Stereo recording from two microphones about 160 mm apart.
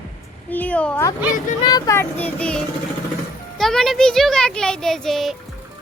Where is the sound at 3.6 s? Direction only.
5° left (ahead or behind).